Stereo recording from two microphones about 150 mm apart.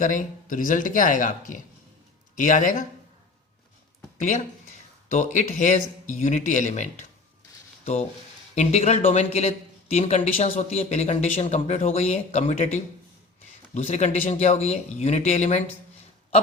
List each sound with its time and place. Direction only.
0.0 s speech: 60° left (ahead or behind)
4.2 s speech: 55° left (ahead or behind)
8.5 s a man's voice: 45° left (ahead or behind)